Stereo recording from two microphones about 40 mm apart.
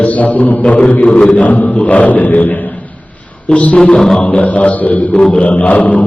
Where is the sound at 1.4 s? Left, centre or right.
Left.